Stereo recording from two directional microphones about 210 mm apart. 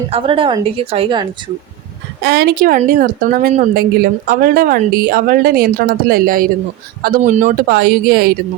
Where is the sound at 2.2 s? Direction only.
50° right (ahead or behind).